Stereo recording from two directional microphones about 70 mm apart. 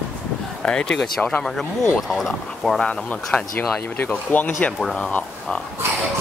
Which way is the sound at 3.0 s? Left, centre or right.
Centre.